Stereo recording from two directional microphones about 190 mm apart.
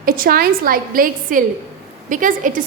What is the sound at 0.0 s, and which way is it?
A woman's voice, 50° right (ahead or behind).